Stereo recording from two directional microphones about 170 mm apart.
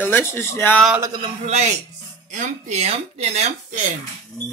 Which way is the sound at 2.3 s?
40° right (ahead or behind).